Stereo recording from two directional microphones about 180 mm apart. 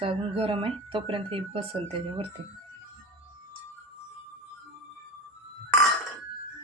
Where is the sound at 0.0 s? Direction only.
30° right (ahead or behind).